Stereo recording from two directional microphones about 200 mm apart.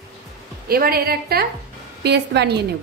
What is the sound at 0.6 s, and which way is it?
A woman's voice, 50° right (ahead or behind).